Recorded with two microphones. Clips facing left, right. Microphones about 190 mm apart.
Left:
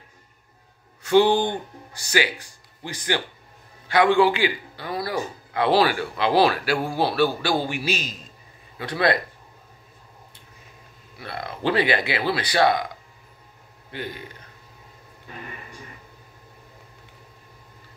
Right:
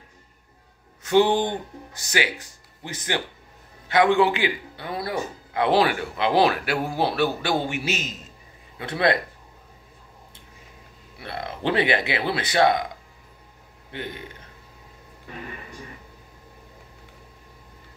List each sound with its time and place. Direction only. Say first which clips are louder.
1.0 s a man's voice: left 1 dB; 20° right (ahead or behind)
2.8 s a man's voice: left 2 dB; 25° right (ahead or behind)
11.1 s a man's voice: even; 25° right (ahead or behind)
13.9 s a man's voice: left 1 dB; 25° right (ahead or behind)